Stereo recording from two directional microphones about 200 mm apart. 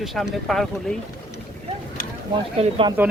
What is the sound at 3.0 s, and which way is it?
Speech, 10° right (ahead or behind).